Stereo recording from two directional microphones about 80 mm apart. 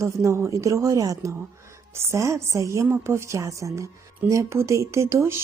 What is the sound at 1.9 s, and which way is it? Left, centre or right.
Speech, right.